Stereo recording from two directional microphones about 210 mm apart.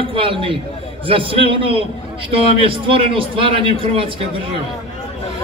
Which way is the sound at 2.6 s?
25° right (ahead or behind).